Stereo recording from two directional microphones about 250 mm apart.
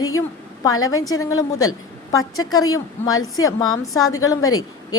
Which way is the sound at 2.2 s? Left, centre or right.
Left.